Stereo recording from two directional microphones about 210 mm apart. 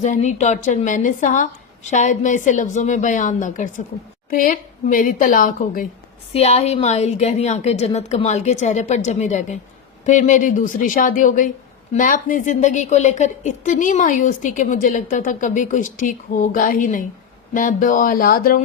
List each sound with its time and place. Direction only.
0.0 s a woman's voice: 35° left (ahead or behind)
6.3 s a woman's voice: 30° left (ahead or behind)